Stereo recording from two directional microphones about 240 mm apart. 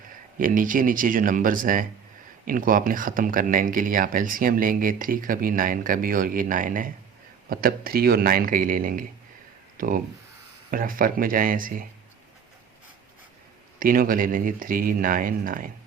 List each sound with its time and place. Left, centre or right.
0.3 s speech: right
13.7 s speech: right